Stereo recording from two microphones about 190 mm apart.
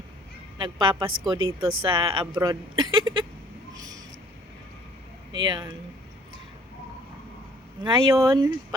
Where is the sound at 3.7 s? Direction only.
20° right (ahead or behind).